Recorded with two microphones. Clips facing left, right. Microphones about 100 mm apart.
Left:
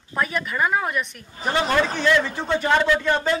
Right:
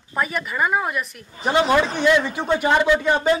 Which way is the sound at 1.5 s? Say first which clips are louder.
Right 3 dB; 15° right (ahead or behind).